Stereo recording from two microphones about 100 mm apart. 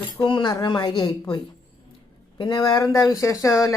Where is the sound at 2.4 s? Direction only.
45° left (ahead or behind).